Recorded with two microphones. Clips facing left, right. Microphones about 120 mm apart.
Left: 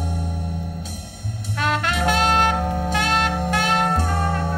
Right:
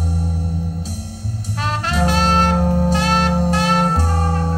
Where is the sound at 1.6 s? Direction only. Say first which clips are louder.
Right 1 dB; 35° right (ahead or behind).